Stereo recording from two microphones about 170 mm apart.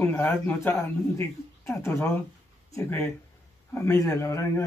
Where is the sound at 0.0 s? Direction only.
10° left (ahead or behind).